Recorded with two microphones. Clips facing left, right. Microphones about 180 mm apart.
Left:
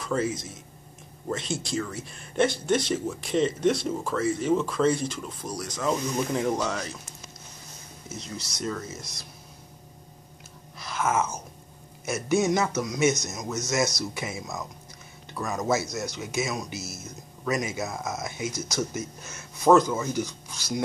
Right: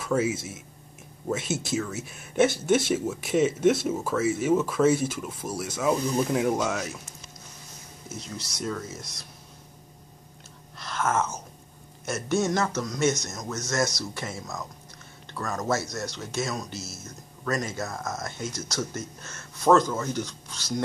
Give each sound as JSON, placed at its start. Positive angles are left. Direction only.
{"t": 0.0, "sound": "a man's voice", "side_deg": -5}
{"t": 8.1, "sound": "speech", "side_deg": -5}
{"t": 10.8, "sound": "a sound", "side_deg": 5}
{"t": 12.1, "sound": "speech", "side_deg": 10}